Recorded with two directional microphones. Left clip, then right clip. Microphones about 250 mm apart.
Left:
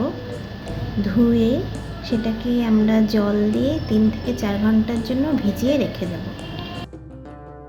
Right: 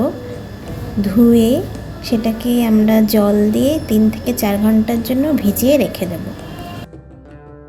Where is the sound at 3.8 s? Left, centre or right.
Centre.